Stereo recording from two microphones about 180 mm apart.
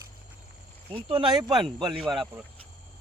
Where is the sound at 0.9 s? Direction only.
30° right (ahead or behind).